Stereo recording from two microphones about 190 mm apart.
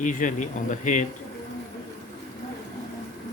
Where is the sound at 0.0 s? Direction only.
40° left (ahead or behind).